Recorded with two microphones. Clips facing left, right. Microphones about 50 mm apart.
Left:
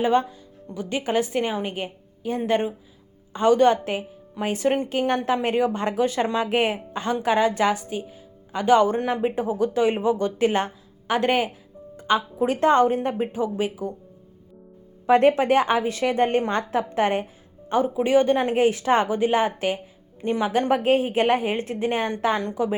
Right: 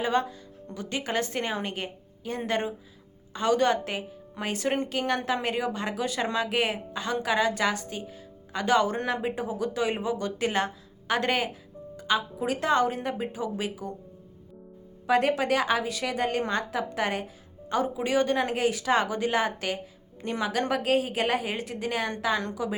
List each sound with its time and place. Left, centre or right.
0.0 s speech: left
11.9 s music: left
12.5 s a woman's voice: left
15.0 s a woman's voice: left